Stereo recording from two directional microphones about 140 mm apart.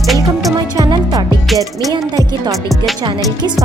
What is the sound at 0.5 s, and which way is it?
Music, 30° right (ahead or behind).